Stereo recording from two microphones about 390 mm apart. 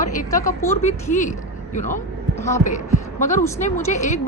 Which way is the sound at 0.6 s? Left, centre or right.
Centre.